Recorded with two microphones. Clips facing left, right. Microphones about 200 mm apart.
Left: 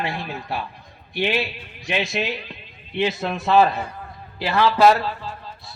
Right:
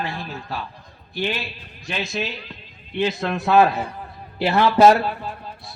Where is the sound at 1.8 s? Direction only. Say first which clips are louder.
Left 3 dB; 15° left (ahead or behind).